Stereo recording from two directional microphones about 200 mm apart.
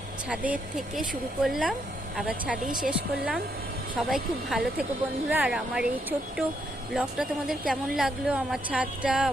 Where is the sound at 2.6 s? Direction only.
45° right (ahead or behind).